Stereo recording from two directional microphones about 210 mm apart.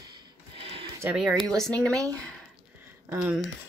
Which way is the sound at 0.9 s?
10° right (ahead or behind).